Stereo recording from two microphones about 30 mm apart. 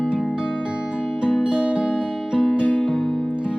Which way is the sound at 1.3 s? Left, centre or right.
Right.